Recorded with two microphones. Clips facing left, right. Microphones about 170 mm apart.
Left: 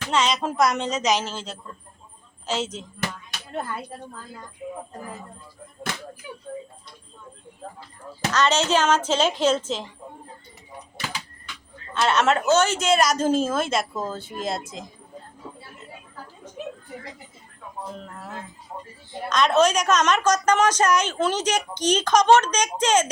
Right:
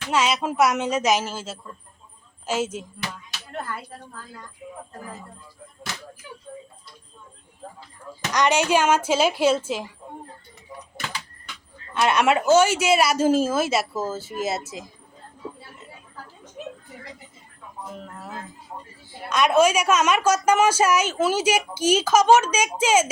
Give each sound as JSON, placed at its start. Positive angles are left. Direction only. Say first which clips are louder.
{"t": 0.1, "sound": "a woman's voice", "louder": "right 1 dB", "side_deg": -5}
{"t": 3.7, "sound": "a woman's voice", "louder": "left 1 dB", "side_deg": 20}
{"t": 6.2, "sound": "speech", "louder": "left 3 dB", "side_deg": 15}
{"t": 8.3, "sound": "a woman's voice", "louder": "right 1 dB", "side_deg": -15}
{"t": 11.9, "sound": "a woman's voice", "louder": "right 1 dB", "side_deg": -15}
{"t": 17.9, "sound": "a woman's voice", "louder": "even", "side_deg": 0}